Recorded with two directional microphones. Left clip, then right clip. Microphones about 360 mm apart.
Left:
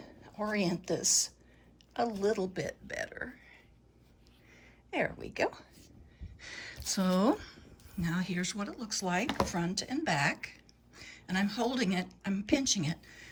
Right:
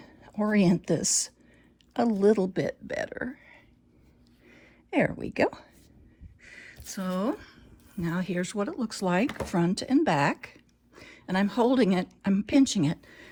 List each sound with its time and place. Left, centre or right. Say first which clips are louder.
0.5 s speech: right 7 dB; centre
3.3 s a sound: right 4 dB; centre
6.4 s speech: left 4 dB; centre